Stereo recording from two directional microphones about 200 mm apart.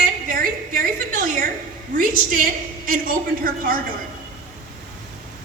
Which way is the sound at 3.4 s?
45° right (ahead or behind).